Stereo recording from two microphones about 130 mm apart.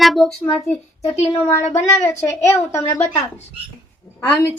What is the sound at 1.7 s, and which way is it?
A woman's voice, 20° left (ahead or behind).